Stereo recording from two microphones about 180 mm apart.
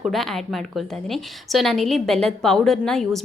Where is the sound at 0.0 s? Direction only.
Centre (ahead or behind).